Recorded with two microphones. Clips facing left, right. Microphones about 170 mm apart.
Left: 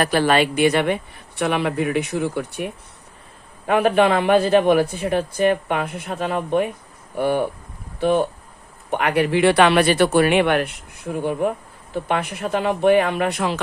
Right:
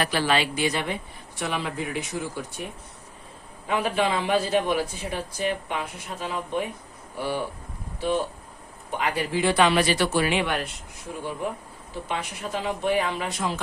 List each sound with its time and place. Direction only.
0.0 s a man's voice: 50° left (ahead or behind)
3.7 s a man's voice: 60° left (ahead or behind)